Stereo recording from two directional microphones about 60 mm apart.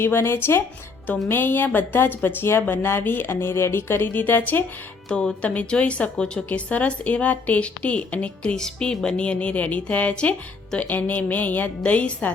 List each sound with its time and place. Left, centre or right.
0.0 s speech: left
5.0 s speech: centre
8.6 s speech: centre